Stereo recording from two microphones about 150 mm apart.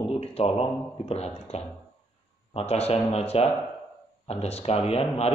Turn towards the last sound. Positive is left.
turn(degrees=45)  # may be behind; listen again after turning